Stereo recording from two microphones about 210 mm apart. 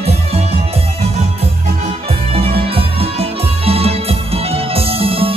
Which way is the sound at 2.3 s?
25° right (ahead or behind).